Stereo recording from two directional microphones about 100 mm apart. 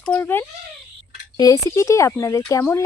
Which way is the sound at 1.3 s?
35° left (ahead or behind).